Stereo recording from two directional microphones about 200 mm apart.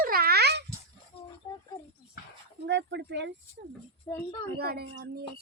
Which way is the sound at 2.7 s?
60° right (ahead or behind).